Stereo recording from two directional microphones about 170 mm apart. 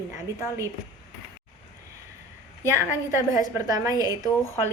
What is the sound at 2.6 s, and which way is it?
A woman's voice, 15° right (ahead or behind).